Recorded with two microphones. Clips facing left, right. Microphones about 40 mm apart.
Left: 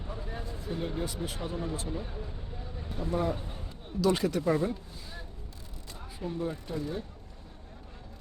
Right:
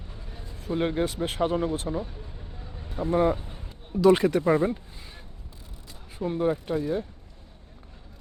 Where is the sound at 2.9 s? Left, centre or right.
Right.